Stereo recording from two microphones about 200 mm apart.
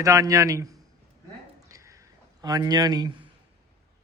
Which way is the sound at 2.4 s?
20° right (ahead or behind).